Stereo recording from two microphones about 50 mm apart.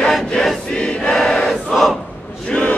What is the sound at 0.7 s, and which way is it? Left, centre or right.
Choir, centre.